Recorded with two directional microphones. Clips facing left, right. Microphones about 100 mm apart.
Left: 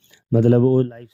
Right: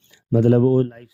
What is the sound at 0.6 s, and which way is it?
Speech, 30° left (ahead or behind).